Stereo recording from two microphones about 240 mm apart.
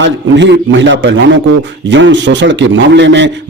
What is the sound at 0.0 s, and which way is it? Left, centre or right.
A man's voice, right.